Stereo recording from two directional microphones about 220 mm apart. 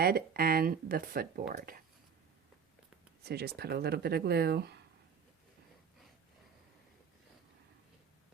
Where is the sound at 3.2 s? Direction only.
45° right (ahead or behind).